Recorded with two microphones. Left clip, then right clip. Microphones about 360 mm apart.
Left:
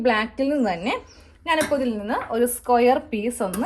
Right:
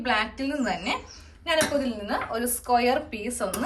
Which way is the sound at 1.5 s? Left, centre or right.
Centre.